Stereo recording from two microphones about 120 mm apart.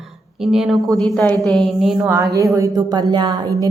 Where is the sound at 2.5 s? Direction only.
30° right (ahead or behind).